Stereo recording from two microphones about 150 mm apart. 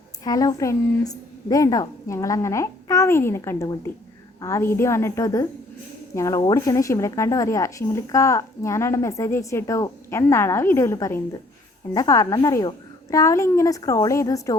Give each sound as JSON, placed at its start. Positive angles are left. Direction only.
{"t": 0.3, "sound": "a woman's voice", "side_deg": 25}